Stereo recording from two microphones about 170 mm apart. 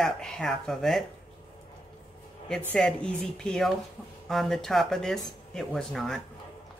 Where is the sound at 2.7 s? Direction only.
5° left (ahead or behind).